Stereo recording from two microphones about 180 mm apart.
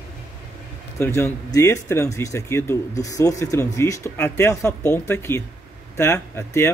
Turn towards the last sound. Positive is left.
turn(degrees=15)  # may be behind; listen again after turning